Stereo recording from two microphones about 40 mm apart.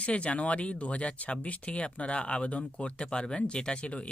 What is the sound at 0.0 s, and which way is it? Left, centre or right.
Speech, left.